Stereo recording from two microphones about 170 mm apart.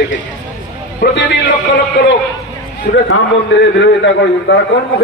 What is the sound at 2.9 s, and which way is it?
Speech, 60° left (ahead or behind).